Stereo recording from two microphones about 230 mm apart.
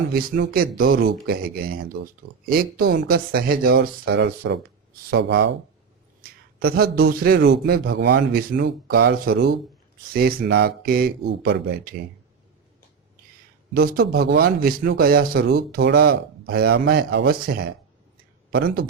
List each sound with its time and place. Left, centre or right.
0.1 s speech: right
6.6 s speech: right
9.3 s speech: right
13.7 s speech: right